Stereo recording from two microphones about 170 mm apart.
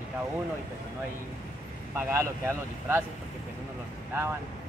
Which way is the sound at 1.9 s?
15° right (ahead or behind).